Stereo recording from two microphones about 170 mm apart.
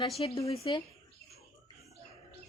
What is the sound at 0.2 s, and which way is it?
Speech, 30° left (ahead or behind).